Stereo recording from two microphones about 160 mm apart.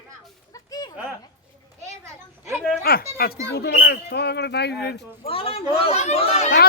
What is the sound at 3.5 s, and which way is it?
Speech, 85° left.